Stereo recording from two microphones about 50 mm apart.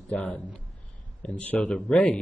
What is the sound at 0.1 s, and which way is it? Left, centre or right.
A man's voice, left.